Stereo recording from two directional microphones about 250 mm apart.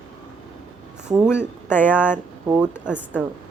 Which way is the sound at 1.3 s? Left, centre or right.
Centre.